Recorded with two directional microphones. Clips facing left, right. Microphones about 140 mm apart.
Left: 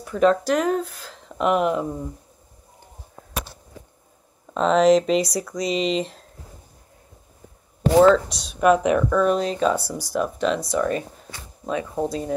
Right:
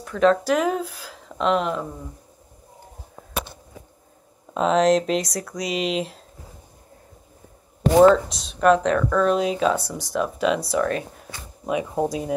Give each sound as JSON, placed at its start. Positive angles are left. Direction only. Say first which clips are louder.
{"t": 0.0, "sound": "speech", "louder": "even", "side_deg": 5}
{"t": 1.4, "sound": "speech", "louder": "left 2 dB", "side_deg": 10}
{"t": 4.6, "sound": "speech", "louder": "left 2 dB", "side_deg": 0}
{"t": 8.1, "sound": "speech", "louder": "left 1 dB", "side_deg": 0}
{"t": 9.4, "sound": "speech", "louder": "even", "side_deg": -5}
{"t": 11.6, "sound": "speech", "louder": "right 2 dB", "side_deg": -15}